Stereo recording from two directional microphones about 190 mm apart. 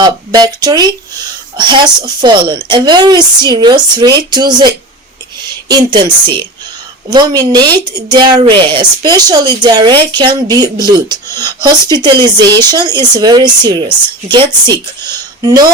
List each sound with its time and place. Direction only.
0.0 s speech: 20° right (ahead or behind)
5.4 s a sound: 20° right (ahead or behind)
7.1 s speech: 20° right (ahead or behind)